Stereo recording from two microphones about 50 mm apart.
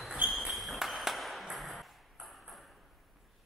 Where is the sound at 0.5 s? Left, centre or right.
Centre.